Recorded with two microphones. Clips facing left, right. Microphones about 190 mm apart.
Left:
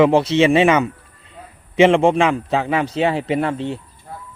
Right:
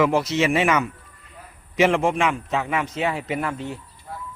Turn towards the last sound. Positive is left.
turn(degrees=30)  # may be behind; listen again after turning